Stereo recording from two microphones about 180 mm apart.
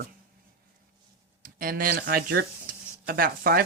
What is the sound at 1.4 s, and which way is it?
Speech, 55° right (ahead or behind).